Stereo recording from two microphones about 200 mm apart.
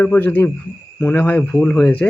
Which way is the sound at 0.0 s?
10° left (ahead or behind).